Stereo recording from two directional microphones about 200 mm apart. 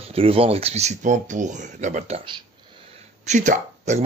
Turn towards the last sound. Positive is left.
turn(degrees=-35)  # may be behind; listen again after turning